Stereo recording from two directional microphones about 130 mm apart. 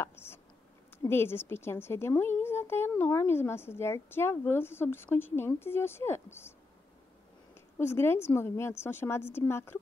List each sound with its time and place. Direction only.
0.0 s a sound: 20° left (ahead or behind)
0.9 s a woman's voice: 20° left (ahead or behind)
7.8 s a woman's voice: 20° left (ahead or behind)